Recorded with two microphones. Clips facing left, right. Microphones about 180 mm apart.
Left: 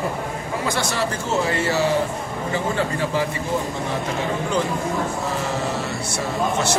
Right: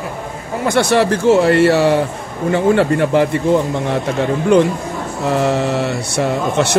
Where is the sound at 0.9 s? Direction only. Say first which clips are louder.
Right 11 dB; 70° right (ahead or behind).